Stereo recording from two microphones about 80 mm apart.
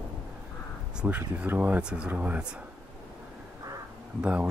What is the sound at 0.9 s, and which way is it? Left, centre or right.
Speech, centre.